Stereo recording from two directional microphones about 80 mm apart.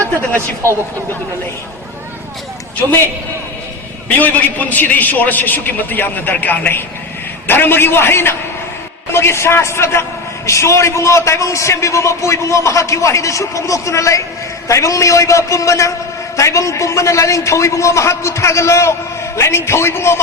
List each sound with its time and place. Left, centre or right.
4.2 s a man's voice: left